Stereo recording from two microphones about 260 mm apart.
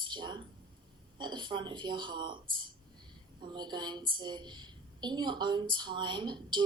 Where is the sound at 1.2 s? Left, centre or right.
Centre.